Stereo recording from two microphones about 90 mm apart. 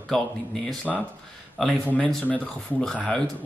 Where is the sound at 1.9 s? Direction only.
15° left (ahead or behind).